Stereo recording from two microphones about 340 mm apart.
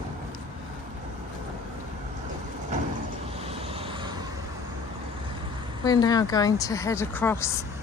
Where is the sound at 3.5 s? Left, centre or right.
Centre.